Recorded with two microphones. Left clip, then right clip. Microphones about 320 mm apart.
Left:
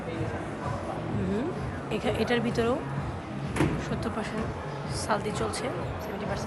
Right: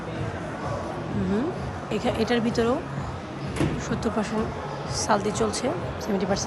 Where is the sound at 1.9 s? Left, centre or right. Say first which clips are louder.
Right 3 dB; centre.